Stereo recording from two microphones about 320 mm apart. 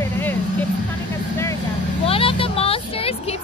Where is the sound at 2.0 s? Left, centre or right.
Centre.